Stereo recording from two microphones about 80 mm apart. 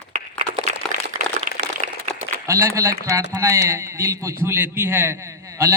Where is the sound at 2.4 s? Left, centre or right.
Right.